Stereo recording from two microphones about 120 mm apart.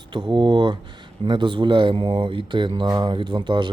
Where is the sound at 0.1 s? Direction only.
40° right (ahead or behind).